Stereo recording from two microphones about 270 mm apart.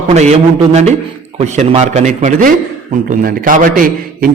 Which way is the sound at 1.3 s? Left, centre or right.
Right.